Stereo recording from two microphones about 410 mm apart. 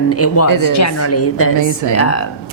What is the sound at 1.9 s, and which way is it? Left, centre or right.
Speech, left.